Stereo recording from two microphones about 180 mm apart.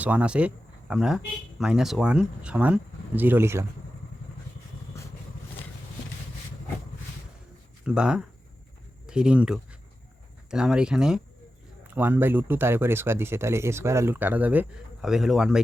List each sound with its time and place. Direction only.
0.0 s speech: 10° right (ahead or behind)
4.9 s vehicle: 15° left (ahead or behind)
7.9 s speech: 5° right (ahead or behind)